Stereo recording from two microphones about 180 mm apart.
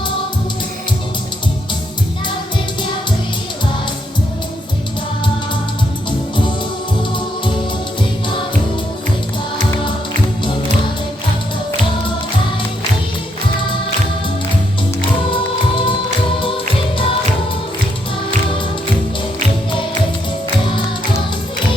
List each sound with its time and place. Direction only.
6.1 s music: 25° left (ahead or behind)
15.3 s music: 30° left (ahead or behind)